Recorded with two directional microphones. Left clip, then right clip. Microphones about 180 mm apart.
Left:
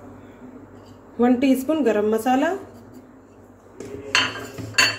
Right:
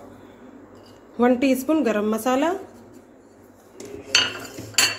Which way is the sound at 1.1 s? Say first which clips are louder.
Even; 30° right (ahead or behind).